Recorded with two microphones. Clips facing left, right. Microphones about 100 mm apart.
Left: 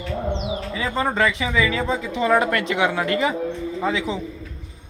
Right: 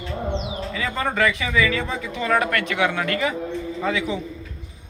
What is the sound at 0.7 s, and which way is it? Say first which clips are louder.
Speech: left 1 dB; 25° left (ahead or behind).